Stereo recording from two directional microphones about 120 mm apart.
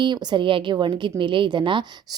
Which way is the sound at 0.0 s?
40° right (ahead or behind).